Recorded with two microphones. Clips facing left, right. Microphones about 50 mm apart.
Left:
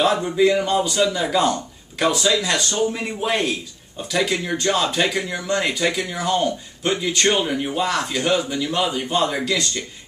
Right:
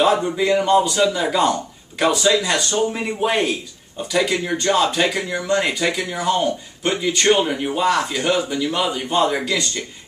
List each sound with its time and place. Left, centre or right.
0.0 s speech: centre
7.6 s speech: centre